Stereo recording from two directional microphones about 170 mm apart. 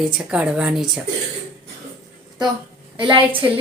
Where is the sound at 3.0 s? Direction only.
30° right (ahead or behind).